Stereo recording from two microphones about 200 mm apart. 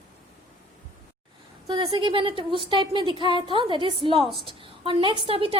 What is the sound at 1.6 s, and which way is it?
A woman's voice, 20° right (ahead or behind).